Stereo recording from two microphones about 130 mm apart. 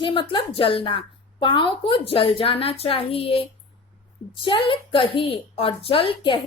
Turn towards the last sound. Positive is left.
turn(degrees=40)  # may be behind; listen again after turning